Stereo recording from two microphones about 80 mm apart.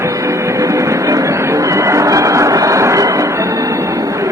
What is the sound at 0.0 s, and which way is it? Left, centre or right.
Music, right.